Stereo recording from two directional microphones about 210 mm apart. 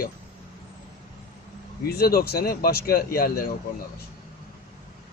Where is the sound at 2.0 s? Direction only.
45° left (ahead or behind).